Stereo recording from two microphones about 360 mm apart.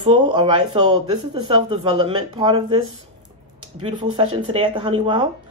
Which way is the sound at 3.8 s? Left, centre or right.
Centre.